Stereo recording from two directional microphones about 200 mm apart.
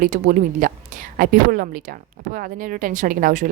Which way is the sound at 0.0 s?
40° right (ahead or behind).